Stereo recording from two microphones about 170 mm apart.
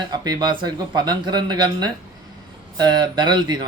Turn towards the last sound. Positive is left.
turn(degrees=-25)  # may be behind; listen again after turning